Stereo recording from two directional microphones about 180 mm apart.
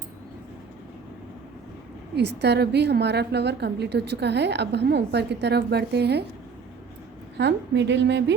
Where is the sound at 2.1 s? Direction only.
65° right (ahead or behind).